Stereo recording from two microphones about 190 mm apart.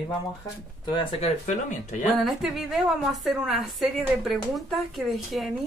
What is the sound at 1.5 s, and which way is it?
Speech, 40° left (ahead or behind).